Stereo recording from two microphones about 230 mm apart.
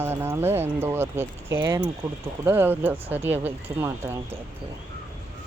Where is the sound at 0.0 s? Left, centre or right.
Centre.